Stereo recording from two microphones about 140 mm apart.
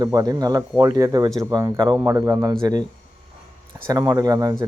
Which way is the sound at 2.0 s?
20° right (ahead or behind).